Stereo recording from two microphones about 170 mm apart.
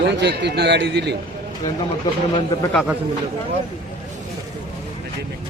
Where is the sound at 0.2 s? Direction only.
80° right.